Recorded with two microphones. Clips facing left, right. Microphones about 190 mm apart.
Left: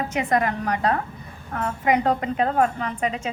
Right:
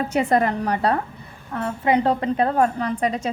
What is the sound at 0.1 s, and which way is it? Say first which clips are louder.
A woman's voice: right 4 dB; 35° right (ahead or behind).